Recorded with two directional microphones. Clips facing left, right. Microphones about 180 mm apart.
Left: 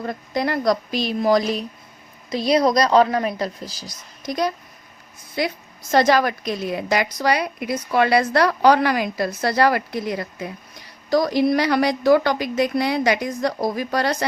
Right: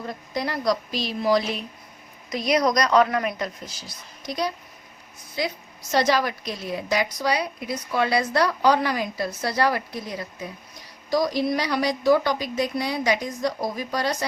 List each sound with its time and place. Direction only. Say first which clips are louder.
0.0 s a woman's voice: left 5 dB; 55° left (ahead or behind)
2.3 s a woman's voice: left 4 dB; 30° left (ahead or behind); by 4.5 s 45° left (ahead or behind)
5.4 s a woman's voice: left 4 dB; 60° left (ahead or behind)